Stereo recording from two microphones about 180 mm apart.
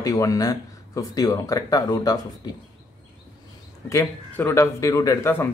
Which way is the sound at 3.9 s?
15° left (ahead or behind).